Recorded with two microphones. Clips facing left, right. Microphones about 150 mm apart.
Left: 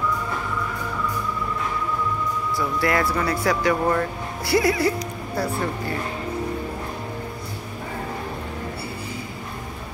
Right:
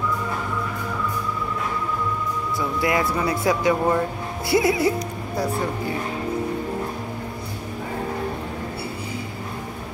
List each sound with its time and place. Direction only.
2.8 s speech: 20° right (ahead or behind)